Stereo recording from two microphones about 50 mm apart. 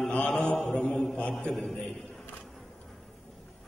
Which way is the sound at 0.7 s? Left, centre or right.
Centre.